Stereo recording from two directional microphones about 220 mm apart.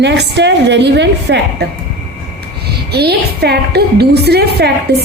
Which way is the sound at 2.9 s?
45° right (ahead or behind).